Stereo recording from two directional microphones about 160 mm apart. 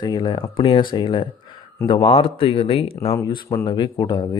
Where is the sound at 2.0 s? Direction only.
35° left (ahead or behind).